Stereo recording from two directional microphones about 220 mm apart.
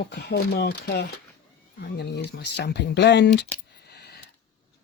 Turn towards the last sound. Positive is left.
turn(degrees=50)  # may be behind; listen again after turning